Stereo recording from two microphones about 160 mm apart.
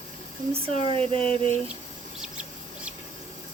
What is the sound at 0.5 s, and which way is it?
Speech, 35° right (ahead or behind).